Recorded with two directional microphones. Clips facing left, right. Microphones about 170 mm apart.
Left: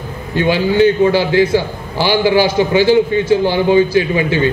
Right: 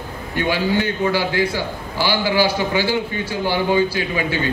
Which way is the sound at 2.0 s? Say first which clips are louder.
Left 6 dB; 15° left (ahead or behind).